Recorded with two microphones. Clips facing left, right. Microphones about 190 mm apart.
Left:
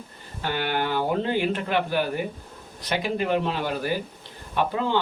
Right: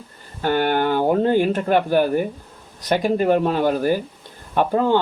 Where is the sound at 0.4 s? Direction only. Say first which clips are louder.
Right 8 dB; 45° right (ahead or behind).